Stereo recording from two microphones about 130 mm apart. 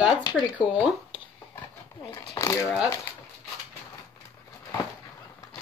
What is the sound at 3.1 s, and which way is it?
Speech, 15° left (ahead or behind).